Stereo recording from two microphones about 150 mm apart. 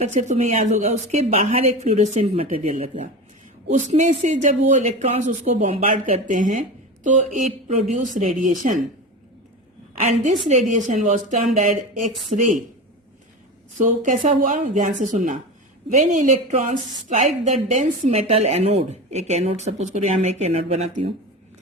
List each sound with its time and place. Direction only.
0.0 s a woman's voice: 50° right (ahead or behind)
10.0 s speech: 55° right (ahead or behind)
13.7 s a woman's voice: 60° right (ahead or behind)